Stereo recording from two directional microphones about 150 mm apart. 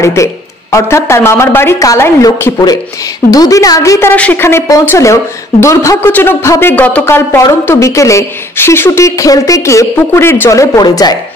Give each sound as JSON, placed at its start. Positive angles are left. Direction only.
{"t": 0.0, "sound": "speech", "side_deg": 20}
{"t": 4.1, "sound": "speech", "side_deg": 10}